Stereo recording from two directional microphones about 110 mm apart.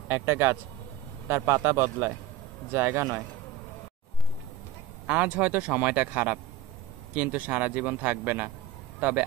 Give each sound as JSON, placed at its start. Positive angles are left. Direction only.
{"t": 0.1, "sound": "a man's voice", "side_deg": -20}
{"t": 5.0, "sound": "speech", "side_deg": -10}